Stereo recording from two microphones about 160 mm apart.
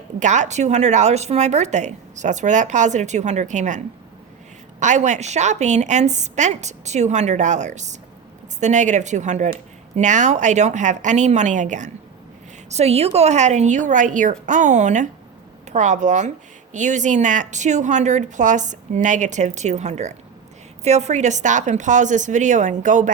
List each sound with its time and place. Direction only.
0.2 s speech: 50° right (ahead or behind)